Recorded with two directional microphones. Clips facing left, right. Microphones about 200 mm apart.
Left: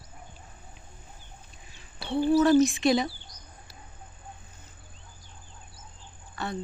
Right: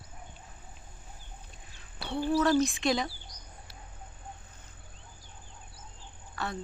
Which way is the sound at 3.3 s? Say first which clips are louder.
Even; 10° right (ahead or behind).